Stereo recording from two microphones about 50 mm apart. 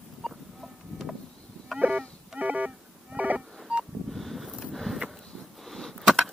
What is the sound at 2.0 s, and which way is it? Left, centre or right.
Music, centre.